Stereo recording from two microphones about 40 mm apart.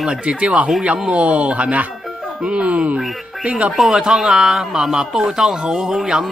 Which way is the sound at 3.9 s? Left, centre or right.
Centre.